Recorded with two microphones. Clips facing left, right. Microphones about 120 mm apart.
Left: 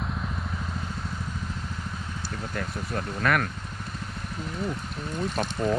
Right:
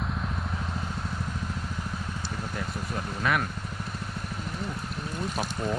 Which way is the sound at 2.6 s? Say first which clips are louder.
Left 4 dB; 50° left (ahead or behind).